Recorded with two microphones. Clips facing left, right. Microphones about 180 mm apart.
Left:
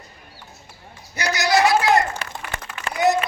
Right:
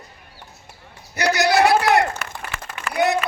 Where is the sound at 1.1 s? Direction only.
60° right (ahead or behind).